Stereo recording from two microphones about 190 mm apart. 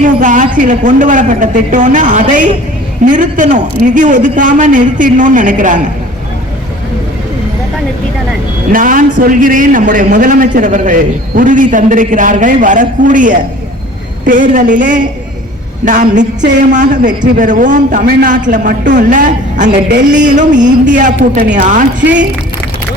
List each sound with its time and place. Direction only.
0.0 s a man's voice: 40° right (ahead or behind)
8.7 s a man's voice: 45° right (ahead or behind)
22.0 s speech: 70° right (ahead or behind)